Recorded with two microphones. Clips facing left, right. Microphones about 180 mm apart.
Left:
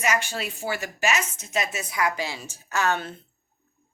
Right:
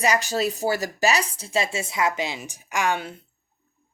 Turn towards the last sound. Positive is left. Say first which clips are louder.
# right 1 dB
turn(degrees=-10)  # may be behind; listen again after turning